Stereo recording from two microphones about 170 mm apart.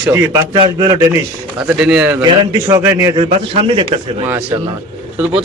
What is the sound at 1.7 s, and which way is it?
Speech, 5° right (ahead or behind).